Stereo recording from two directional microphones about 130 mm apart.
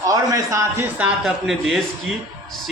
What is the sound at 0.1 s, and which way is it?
Speech, 25° right (ahead or behind).